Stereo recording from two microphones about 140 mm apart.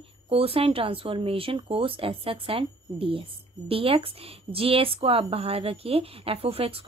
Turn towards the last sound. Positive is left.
turn(degrees=-45)  # may be behind; listen again after turning